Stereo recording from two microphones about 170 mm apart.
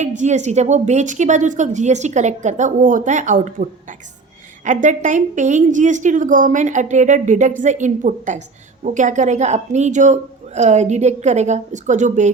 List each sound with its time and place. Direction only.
0.0 s a woman's voice: 45° right (ahead or behind)